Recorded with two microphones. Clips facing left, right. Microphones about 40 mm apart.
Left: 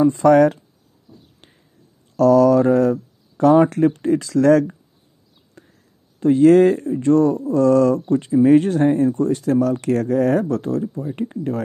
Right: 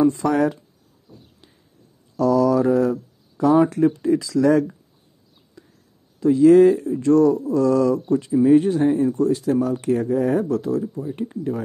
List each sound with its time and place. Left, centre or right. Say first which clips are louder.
0.1 s speech: left 7 dB; left
2.1 s speech: left 5 dB; left
2.6 s speech: left 3 dB; left
5.6 s a sound: even; left
6.1 s speech: left 1 dB; left
8.1 s speech: left 1 dB; left
8.5 s speech: left 1 dB; left
9.0 s speech: left 1 dB; left
10.5 s speech: even; left